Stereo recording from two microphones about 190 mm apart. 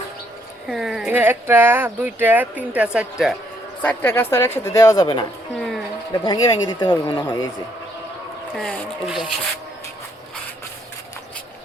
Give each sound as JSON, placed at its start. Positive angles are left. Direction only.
{"t": 0.7, "sound": "speech", "side_deg": 0}
{"t": 3.8, "sound": "a woman's voice", "side_deg": 10}
{"t": 5.5, "sound": "music", "side_deg": 0}
{"t": 6.2, "sound": "speech", "side_deg": 25}
{"t": 8.5, "sound": "speech", "side_deg": 0}